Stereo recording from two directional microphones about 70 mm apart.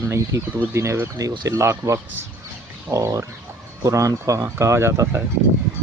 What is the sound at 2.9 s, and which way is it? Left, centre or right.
Speech, right.